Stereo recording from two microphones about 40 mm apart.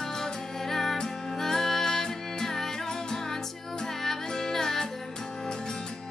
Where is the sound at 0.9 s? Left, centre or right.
Centre.